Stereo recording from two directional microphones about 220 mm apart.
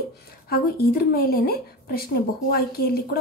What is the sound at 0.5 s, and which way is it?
A woman's voice, 45° left (ahead or behind).